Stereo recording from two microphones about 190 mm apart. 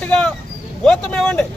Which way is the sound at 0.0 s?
5° left (ahead or behind).